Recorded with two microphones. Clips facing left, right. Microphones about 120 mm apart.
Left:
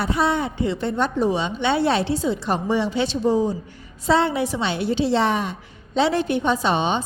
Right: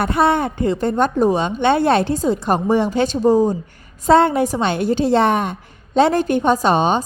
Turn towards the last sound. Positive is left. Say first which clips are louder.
# right 5 dB
turn(degrees=-45)  # may be behind; listen again after turning